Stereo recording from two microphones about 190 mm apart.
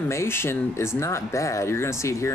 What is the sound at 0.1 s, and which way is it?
Speech, 15° left (ahead or behind).